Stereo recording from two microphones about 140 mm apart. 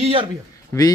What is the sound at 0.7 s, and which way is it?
Speech, 10° left (ahead or behind).